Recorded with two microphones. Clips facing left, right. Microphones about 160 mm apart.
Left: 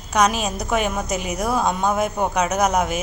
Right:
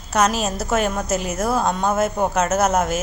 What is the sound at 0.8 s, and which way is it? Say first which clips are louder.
Speech: right 2 dB; 10° left (ahead or behind).